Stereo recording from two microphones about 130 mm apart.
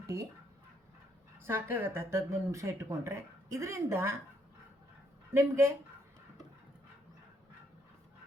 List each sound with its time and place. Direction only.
1.5 s speech: 15° right (ahead or behind)
5.3 s speech: 20° right (ahead or behind)